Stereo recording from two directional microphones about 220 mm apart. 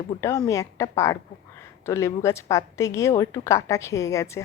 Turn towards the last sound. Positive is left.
turn(degrees=15)  # may be behind; listen again after turning